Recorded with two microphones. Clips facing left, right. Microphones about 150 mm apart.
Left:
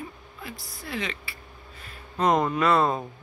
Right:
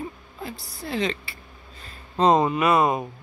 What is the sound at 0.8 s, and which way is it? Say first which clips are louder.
Speech: right 6 dB; 35° right (ahead or behind).